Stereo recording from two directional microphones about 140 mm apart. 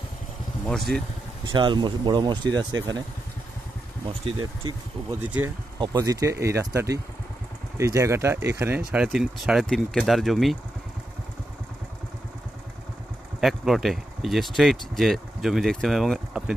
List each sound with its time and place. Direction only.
0.7 s speech: 5° left (ahead or behind)
1.4 s speech: 35° right (ahead or behind)
4.0 s speech: 40° right (ahead or behind)
5.8 s speech: 25° right (ahead or behind)
9.0 s speech: 5° right (ahead or behind)
13.4 s speech: centre (ahead or behind)